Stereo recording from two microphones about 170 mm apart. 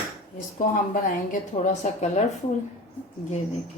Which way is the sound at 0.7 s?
50° left (ahead or behind).